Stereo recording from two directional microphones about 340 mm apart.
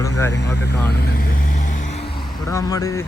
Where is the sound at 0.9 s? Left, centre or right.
Left.